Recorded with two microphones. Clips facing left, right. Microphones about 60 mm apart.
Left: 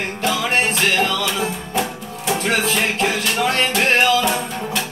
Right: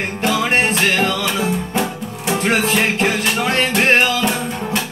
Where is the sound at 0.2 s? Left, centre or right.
Right.